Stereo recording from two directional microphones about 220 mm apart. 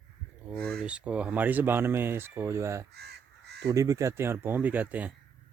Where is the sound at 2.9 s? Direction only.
50° right (ahead or behind).